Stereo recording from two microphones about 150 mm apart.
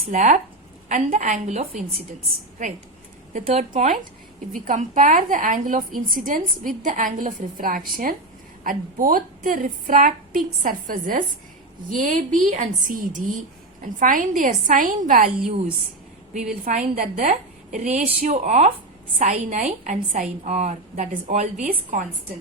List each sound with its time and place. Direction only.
0.1 s a woman's voice: 60° right (ahead or behind)
16.6 s a woman's voice: 60° right (ahead or behind)